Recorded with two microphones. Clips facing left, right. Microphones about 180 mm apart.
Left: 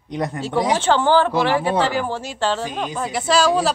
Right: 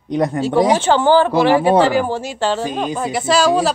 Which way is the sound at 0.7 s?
10° right (ahead or behind).